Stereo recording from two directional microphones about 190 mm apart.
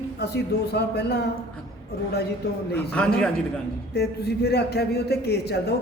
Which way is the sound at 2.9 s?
5° left (ahead or behind).